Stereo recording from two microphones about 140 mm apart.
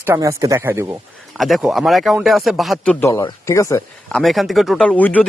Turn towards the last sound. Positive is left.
turn(degrees=10)  # may be behind; listen again after turning